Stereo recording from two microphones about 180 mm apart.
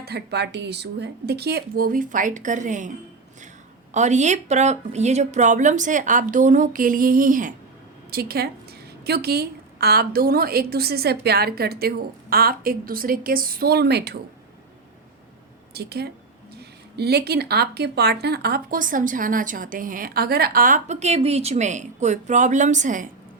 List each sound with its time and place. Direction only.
0.0 s a woman's voice: 65° right (ahead or behind); by 2.9 s 45° right (ahead or behind)
3.9 s speech: 40° right (ahead or behind)
8.1 s a woman's voice: 60° right (ahead or behind)
15.7 s a woman's voice: 65° right (ahead or behind); by 23.0 s 45° right (ahead or behind)